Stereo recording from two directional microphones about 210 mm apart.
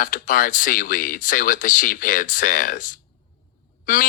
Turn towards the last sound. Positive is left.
turn(degrees=40)  # may be behind; listen again after turning